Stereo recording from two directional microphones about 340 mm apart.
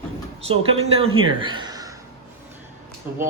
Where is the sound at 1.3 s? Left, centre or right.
Centre.